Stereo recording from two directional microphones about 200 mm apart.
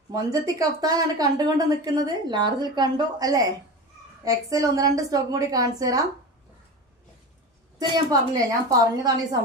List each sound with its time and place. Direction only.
0.1 s a woman's voice: 15° right (ahead or behind)
7.8 s speech: 20° right (ahead or behind)